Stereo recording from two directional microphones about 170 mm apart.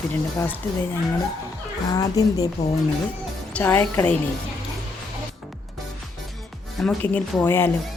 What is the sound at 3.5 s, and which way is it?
Speech, 10° left (ahead or behind).